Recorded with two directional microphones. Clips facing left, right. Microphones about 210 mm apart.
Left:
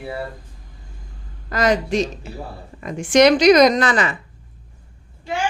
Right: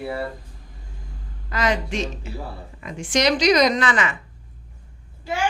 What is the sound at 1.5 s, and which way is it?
A woman's voice, 40° left (ahead or behind).